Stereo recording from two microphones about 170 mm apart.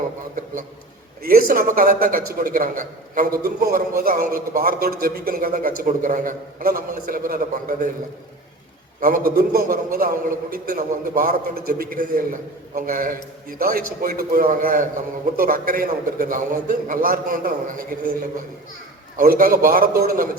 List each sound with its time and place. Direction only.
1.2 s a man's voice: 55° right (ahead or behind)
9.0 s a man's voice: 55° right (ahead or behind)
19.1 s a man's voice: 55° right (ahead or behind)